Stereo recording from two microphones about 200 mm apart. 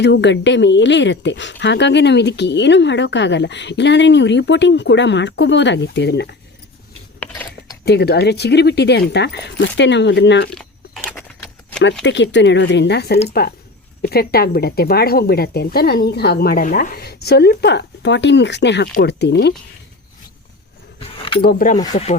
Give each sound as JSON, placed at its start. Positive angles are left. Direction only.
{"t": 0.0, "sound": "speech", "side_deg": 60}
{"t": 7.2, "sound": "a sound", "side_deg": 5}
{"t": 7.9, "sound": "speech", "side_deg": 55}
{"t": 10.5, "sound": "biting", "side_deg": 5}
{"t": 12.0, "sound": "speech", "side_deg": 65}
{"t": 21.0, "sound": "keys jangling", "side_deg": 25}
{"t": 21.4, "sound": "speech", "side_deg": 45}